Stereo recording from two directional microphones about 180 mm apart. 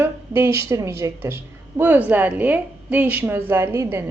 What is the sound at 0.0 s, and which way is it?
A woman's voice, 15° right (ahead or behind).